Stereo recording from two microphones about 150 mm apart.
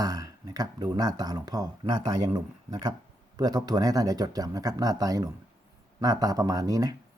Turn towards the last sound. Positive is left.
turn(degrees=-25)  # may be behind; listen again after turning